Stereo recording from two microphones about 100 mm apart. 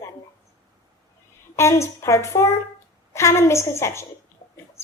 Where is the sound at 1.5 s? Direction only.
30° left (ahead or behind).